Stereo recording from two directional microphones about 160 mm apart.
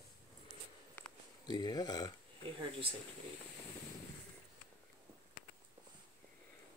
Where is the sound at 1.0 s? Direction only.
10° left (ahead or behind).